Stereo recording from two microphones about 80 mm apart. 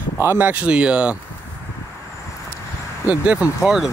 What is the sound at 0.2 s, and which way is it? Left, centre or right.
Speech, right.